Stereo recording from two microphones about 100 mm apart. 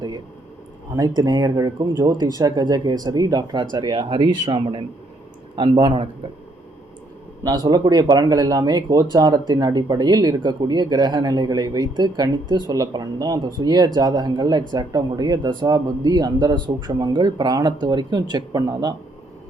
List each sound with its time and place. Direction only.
0.9 s a man's voice: 40° right (ahead or behind); by 6.1 s 55° right (ahead or behind)
7.4 s speech: 40° right (ahead or behind)